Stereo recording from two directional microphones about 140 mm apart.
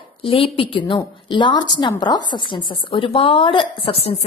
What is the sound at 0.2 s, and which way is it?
A woman's voice, 40° left (ahead or behind).